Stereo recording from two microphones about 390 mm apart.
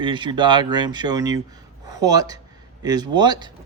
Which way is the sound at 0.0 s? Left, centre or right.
Centre.